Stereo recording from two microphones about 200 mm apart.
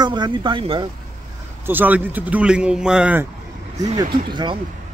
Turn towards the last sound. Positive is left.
turn(degrees=-25)  # may be behind; listen again after turning